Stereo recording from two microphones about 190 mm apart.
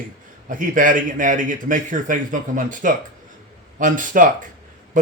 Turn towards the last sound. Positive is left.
turn(degrees=-45)  # may be behind; listen again after turning